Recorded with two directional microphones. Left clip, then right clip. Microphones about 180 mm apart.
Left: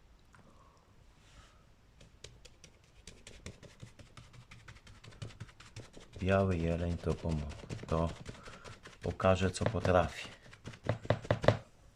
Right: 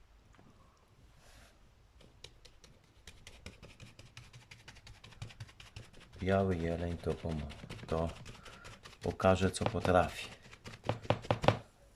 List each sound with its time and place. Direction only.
2.2 s a sound: 5° left (ahead or behind)
4.4 s music: 25° right (ahead or behind)
6.1 s speech: 5° left (ahead or behind)
8.8 s a sound: 30° right (ahead or behind)
9.1 s speech: centre (ahead or behind)
11.3 s chopping: 5° right (ahead or behind)